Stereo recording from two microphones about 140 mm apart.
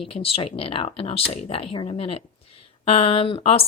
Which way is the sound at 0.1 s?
45° left (ahead or behind).